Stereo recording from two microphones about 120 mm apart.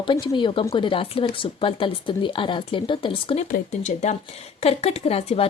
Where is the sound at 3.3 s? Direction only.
70° left (ahead or behind).